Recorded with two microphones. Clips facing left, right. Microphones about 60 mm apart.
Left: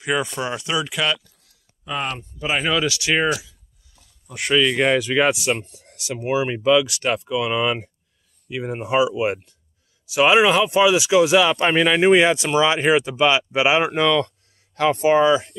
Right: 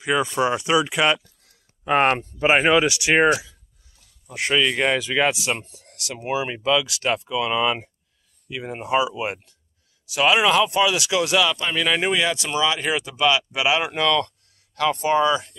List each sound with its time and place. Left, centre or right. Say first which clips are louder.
0.0 s speech: right 1 dB; centre
0.4 s speech: right 5 dB; centre
1.9 s speech: right 8 dB; right
2.3 s speech: right 3 dB; right
2.7 s speech: right 3 dB; right
4.3 s speech: left 2 dB; centre
11.5 s speech: left 7 dB; left
11.8 s speech: left 6 dB; centre